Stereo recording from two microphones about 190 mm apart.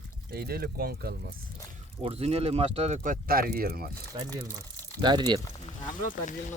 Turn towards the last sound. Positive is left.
turn(degrees=40)  # may be behind; listen again after turning